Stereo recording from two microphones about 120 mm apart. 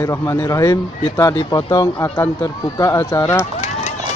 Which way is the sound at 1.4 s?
40° left (ahead or behind).